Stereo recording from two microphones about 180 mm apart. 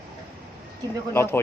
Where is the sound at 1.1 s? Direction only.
15° left (ahead or behind).